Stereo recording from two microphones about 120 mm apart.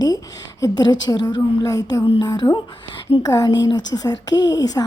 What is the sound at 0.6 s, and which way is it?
A woman's voice, 35° left (ahead or behind).